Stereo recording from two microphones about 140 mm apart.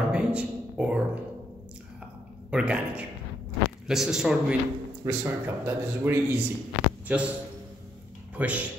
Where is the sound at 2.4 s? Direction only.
10° right (ahead or behind).